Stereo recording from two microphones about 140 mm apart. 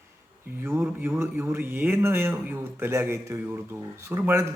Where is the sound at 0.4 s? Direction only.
15° right (ahead or behind).